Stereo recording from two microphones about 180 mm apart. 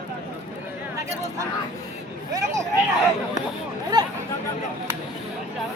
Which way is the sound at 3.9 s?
25° right (ahead or behind).